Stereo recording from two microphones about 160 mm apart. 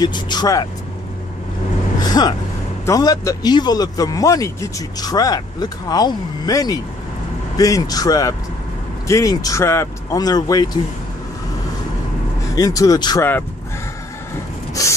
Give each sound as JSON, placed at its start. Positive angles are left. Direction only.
{"t": 0.0, "sound": "speech", "side_deg": 25}
{"t": 2.0, "sound": "vehicle", "side_deg": 25}
{"t": 2.8, "sound": "speech", "side_deg": 20}
{"t": 12.5, "sound": "speech", "side_deg": 20}
{"t": 14.7, "sound": "a sound", "side_deg": 20}